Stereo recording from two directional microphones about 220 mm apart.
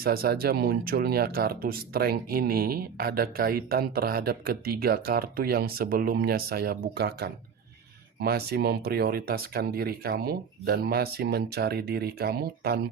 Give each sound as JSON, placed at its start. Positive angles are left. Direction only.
{"t": 0.0, "sound": "speech", "side_deg": -45}